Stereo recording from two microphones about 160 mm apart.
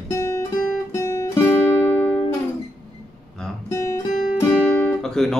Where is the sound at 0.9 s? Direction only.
15° left (ahead or behind).